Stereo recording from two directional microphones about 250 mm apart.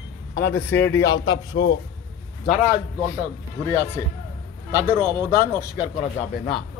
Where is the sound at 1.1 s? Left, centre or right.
Left.